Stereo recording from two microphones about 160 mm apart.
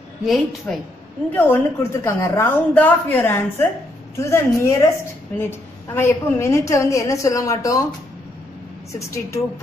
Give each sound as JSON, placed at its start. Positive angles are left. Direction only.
{"t": 0.2, "sound": "a woman's voice", "side_deg": 0}
{"t": 1.3, "sound": "a woman's voice", "side_deg": 15}
{"t": 5.9, "sound": "a woman's voice", "side_deg": 15}